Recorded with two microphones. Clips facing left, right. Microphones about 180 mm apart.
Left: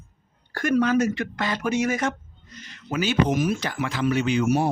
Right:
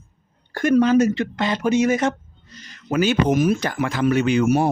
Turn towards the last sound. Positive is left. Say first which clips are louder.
# right 4 dB
turn(degrees=-55)  # may be behind; listen again after turning